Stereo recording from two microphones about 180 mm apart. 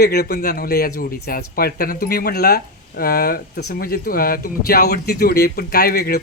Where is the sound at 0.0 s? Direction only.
60° left (ahead or behind).